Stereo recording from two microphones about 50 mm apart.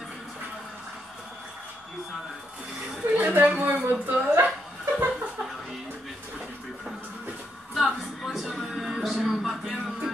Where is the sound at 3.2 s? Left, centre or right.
Right.